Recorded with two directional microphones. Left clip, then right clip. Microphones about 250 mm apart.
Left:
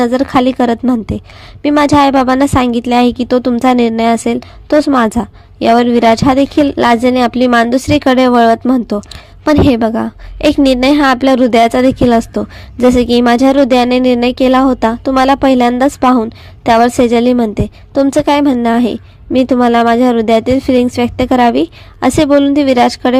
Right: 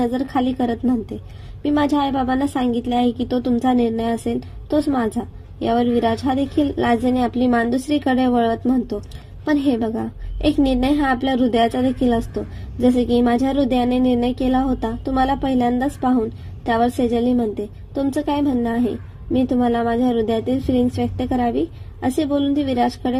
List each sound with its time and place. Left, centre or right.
0.0 s a woman's voice: left